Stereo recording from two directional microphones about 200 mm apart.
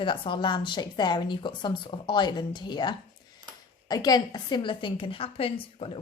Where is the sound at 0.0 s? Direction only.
25° left (ahead or behind).